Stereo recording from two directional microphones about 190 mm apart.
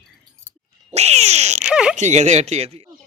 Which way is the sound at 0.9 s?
35° right (ahead or behind).